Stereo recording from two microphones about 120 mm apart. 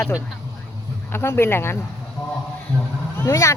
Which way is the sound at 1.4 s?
20° left (ahead or behind).